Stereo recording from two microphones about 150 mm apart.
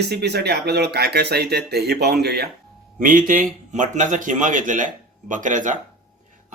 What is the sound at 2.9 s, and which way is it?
A man's voice, 65° right (ahead or behind).